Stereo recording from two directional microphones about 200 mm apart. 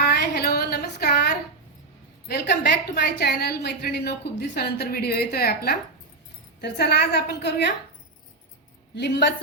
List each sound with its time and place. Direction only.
0.0 s a sound: 55° left (ahead or behind)
2.2 s a woman's voice: 55° left (ahead or behind)
9.0 s a woman's voice: 60° left (ahead or behind)